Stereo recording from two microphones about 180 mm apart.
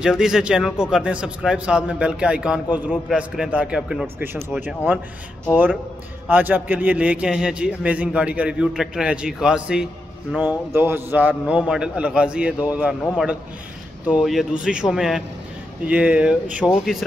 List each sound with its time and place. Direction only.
0.0 s a man's voice: 5° right (ahead or behind)
5.5 s a man's voice: 10° right (ahead or behind)
14.0 s a man's voice: 5° right (ahead or behind)